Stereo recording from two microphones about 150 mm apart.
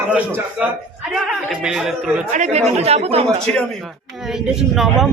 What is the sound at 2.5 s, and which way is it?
Speech, 45° right (ahead or behind).